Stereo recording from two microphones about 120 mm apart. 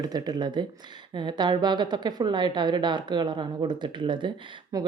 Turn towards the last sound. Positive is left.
turn(degrees=-30)  # may be behind; listen again after turning